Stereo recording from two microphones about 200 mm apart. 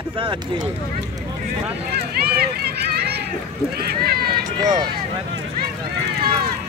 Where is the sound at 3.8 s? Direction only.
50° right (ahead or behind).